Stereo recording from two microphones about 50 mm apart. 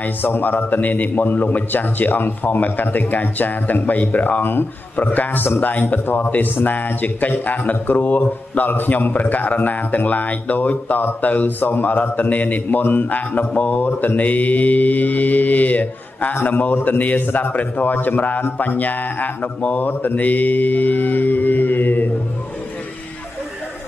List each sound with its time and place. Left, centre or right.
0.0 s a man's voice: left
18.4 s speech: left
18.8 s a man's voice: left
19.9 s a man's voice: left